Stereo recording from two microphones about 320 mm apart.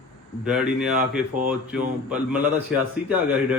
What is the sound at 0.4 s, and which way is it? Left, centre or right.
A man's voice, centre.